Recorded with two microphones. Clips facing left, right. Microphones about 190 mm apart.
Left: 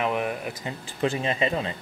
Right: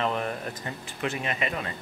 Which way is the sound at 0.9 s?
30° left (ahead or behind).